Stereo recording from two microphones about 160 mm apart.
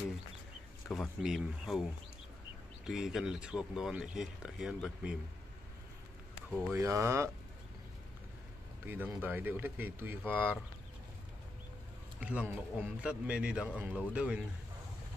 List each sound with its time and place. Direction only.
0.8 s speech: centre (ahead or behind)
6.7 s speech: 20° right (ahead or behind)
8.8 s speech: 10° right (ahead or behind)
12.2 s speech: 10° right (ahead or behind)